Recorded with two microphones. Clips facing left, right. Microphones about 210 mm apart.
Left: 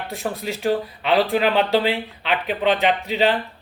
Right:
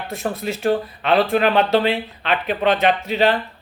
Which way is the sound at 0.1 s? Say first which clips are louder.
Right 3 dB; 15° left (ahead or behind).